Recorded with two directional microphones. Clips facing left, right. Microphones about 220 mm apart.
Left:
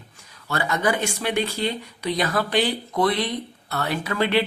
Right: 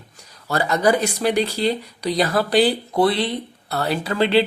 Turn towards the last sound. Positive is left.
turn(degrees=-30)  # may be behind; listen again after turning